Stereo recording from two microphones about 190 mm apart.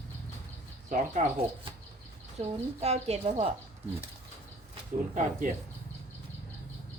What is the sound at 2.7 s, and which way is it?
Speech, 35° right (ahead or behind).